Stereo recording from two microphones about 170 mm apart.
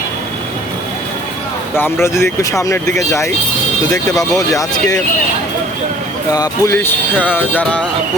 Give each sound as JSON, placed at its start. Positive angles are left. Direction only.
{"t": 1.7, "sound": "speech", "side_deg": 15}
{"t": 3.9, "sound": "speech", "side_deg": 20}
{"t": 6.3, "sound": "speech", "side_deg": 20}